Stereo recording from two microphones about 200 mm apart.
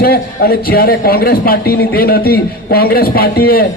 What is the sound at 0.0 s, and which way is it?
A man's voice, 50° left (ahead or behind).